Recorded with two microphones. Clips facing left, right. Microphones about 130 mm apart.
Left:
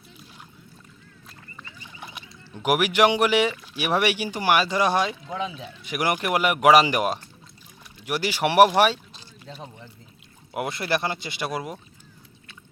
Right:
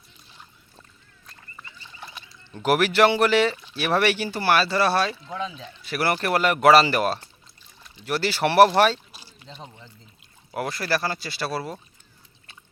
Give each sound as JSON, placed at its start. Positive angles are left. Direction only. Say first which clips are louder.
{"t": 1.8, "sound": "a sound", "louder": "left 2 dB", "side_deg": 15}
{"t": 3.8, "sound": "speech", "louder": "right 1 dB", "side_deg": 15}
{"t": 10.5, "sound": "speech", "louder": "even", "side_deg": 20}